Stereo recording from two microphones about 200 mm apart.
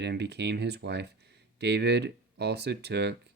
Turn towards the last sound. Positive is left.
turn(degrees=-55)  # may be behind; listen again after turning